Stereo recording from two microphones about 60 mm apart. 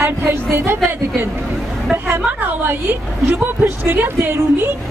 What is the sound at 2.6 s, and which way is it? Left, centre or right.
A woman's voice, right.